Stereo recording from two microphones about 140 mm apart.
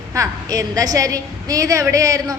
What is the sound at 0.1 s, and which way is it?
A woman's voice, 25° right (ahead or behind).